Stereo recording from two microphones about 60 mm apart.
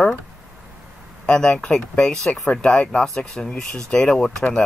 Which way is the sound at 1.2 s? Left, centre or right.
Centre.